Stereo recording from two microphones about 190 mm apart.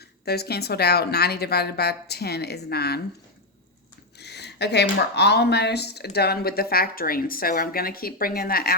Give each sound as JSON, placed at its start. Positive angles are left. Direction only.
{"t": 0.3, "sound": "a woman's voice", "side_deg": 55}
{"t": 4.2, "sound": "a woman's voice", "side_deg": 60}